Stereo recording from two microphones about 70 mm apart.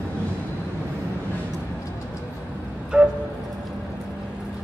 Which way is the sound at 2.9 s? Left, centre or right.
Centre.